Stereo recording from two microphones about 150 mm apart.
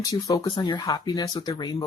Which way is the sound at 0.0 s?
25° left (ahead or behind).